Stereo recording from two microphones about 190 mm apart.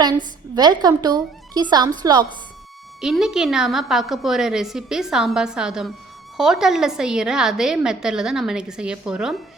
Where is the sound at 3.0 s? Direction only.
Centre (ahead or behind).